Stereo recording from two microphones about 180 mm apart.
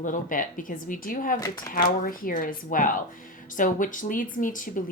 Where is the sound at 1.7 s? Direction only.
50° left (ahead or behind).